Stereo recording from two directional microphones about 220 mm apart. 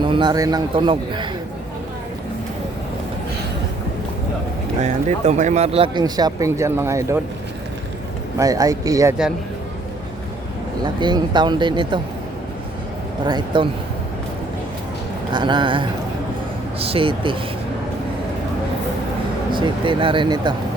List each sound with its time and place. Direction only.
0.0 s speech: 20° right (ahead or behind)
4.8 s speech: 30° right (ahead or behind); by 7.2 s 10° right (ahead or behind)
8.4 s speech: 15° right (ahead or behind)
10.8 s speech: 20° right (ahead or behind)
13.2 s speech: 20° right (ahead or behind)
15.3 s speech: 20° right (ahead or behind)
19.5 s speech: 20° right (ahead or behind)